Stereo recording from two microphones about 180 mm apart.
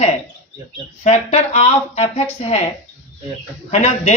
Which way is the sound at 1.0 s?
40° left (ahead or behind).